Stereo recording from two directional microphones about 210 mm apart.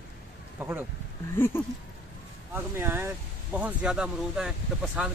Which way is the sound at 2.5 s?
10° right (ahead or behind).